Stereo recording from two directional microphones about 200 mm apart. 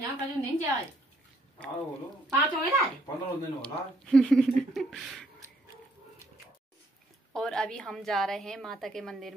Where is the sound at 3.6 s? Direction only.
5° left (ahead or behind).